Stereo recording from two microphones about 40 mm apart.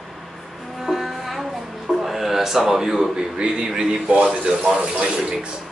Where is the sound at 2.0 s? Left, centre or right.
Centre.